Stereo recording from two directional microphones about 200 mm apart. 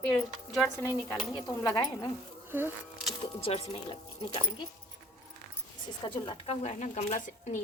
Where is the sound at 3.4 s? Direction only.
30° left (ahead or behind).